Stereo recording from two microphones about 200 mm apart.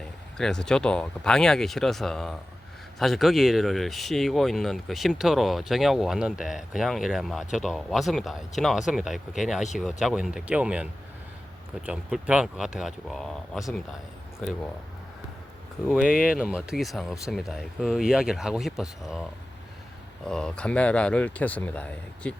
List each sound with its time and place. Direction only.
0.0 s speech: 5° left (ahead or behind)
16.0 s speech: 45° left (ahead or behind)
16.4 s speech: 5° right (ahead or behind)
20.2 s speech: 5° left (ahead or behind)